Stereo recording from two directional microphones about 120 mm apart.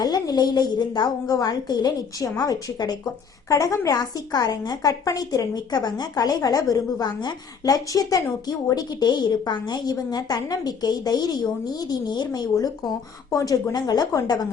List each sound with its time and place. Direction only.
0.0 s a woman's voice: 35° left (ahead or behind)